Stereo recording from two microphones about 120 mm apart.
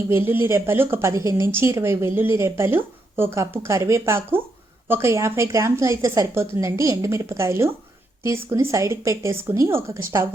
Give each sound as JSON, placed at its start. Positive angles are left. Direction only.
{"t": 0.1, "sound": "speech", "side_deg": -20}